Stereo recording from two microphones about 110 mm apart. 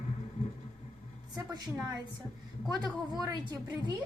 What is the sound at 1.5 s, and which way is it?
Speech, 35° right (ahead or behind).